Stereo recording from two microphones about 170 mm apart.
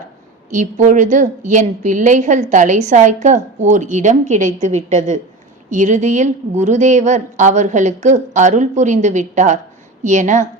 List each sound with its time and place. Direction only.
0.5 s a woman's voice: 50° right (ahead or behind)